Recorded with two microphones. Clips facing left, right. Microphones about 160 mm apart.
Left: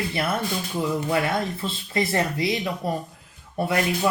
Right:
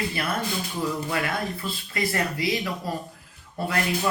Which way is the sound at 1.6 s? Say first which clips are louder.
Left 3 dB; 25° left (ahead or behind).